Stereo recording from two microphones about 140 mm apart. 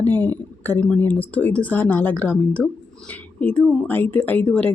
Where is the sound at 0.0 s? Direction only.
15° left (ahead or behind).